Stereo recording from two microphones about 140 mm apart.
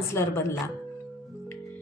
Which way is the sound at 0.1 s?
20° left (ahead or behind).